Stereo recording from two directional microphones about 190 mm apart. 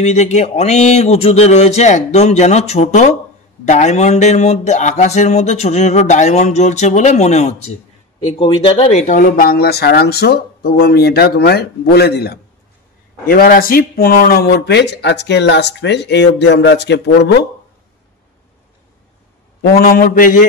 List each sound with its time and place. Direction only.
0.0 s a sound: 35° left (ahead or behind)
8.4 s a man's voice: 30° left (ahead or behind); by 17.5 s 65° left (ahead or behind)
19.8 s mantra: 50° left (ahead or behind)